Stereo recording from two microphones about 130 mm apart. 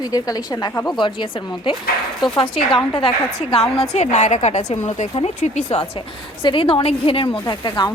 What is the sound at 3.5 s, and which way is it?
A woman's voice, 50° left (ahead or behind).